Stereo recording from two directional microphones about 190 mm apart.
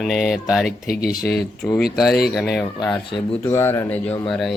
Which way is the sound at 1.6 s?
10° left (ahead or behind).